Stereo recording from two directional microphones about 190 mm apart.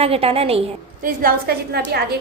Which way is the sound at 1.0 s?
50° right (ahead or behind).